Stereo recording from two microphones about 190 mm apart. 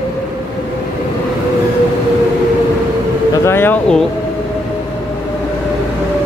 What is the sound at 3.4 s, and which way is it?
Speech, 10° left (ahead or behind).